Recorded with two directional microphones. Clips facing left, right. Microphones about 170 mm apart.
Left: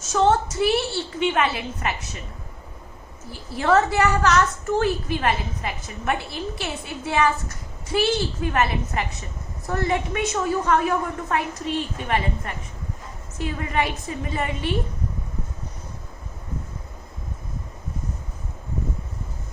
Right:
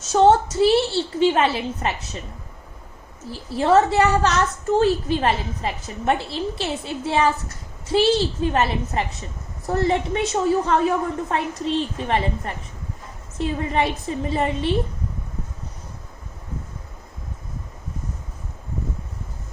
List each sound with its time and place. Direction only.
0.1 s a woman's voice: 30° right (ahead or behind)
3.3 s a woman's voice: 25° right (ahead or behind)